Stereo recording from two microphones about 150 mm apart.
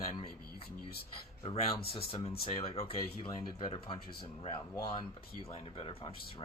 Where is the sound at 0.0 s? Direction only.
40° left (ahead or behind).